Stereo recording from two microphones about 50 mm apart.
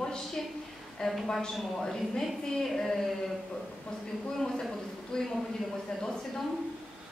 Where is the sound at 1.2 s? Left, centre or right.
Centre.